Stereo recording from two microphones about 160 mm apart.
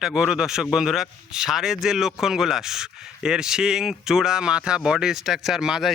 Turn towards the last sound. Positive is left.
turn(degrees=-5)  # may be behind; listen again after turning